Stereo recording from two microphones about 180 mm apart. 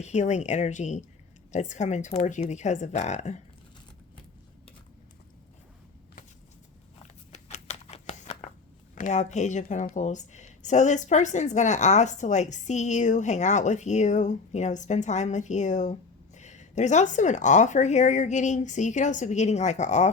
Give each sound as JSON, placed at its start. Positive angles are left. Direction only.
{"t": 0.0, "sound": "a woman's voice", "side_deg": 40}
{"t": 7.3, "sound": "a sound", "side_deg": 40}
{"t": 9.0, "sound": "a woman's voice", "side_deg": 45}